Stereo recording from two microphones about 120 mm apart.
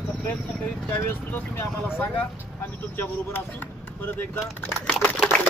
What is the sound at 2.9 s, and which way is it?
Speech, 15° left (ahead or behind).